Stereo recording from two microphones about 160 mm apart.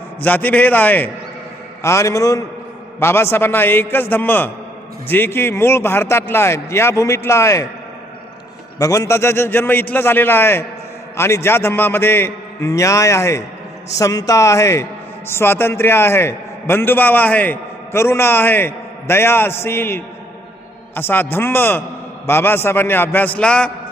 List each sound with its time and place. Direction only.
0.2 s a man's voice: 10° left (ahead or behind)
8.8 s a man's voice: 20° left (ahead or behind)